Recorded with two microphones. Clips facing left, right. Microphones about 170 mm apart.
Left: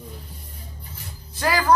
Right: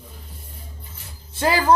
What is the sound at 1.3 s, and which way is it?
Speech, 25° right (ahead or behind).